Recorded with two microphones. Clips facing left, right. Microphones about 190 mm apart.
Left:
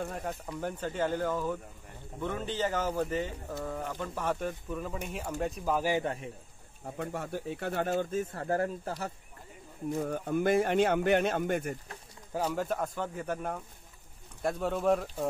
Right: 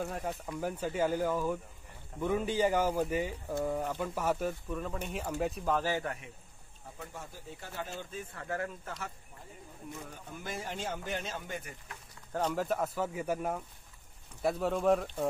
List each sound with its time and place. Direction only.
0.0 s speech: centre (ahead or behind)
5.7 s speech: 15° left (ahead or behind)
7.0 s speech: 65° left (ahead or behind); by 9.1 s 35° left (ahead or behind)
9.9 s speech: 50° left (ahead or behind)
12.3 s speech: 5° left (ahead or behind)